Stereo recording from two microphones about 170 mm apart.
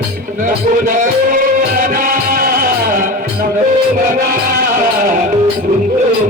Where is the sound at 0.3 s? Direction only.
50° right (ahead or behind).